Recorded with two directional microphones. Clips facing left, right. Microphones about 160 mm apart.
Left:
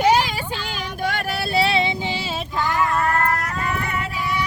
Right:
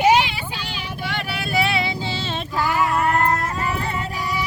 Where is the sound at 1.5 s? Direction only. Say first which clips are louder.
Left 2 dB; 30° left (ahead or behind).